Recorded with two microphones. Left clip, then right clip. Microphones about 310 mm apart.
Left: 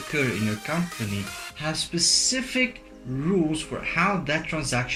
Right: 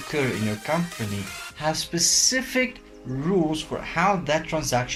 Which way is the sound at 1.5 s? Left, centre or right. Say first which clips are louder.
Right 3 dB; right.